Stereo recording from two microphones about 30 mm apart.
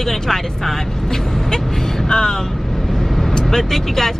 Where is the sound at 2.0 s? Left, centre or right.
Left.